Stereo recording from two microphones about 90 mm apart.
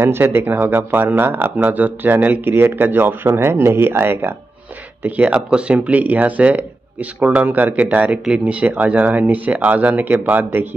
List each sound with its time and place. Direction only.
0.0 s speech: 25° right (ahead or behind)